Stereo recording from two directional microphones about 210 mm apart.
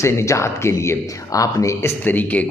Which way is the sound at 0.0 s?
15° left (ahead or behind).